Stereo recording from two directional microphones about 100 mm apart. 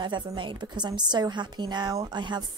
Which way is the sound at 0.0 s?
50° right (ahead or behind).